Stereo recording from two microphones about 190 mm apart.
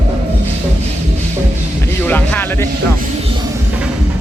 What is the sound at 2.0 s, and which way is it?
Music, 10° left (ahead or behind).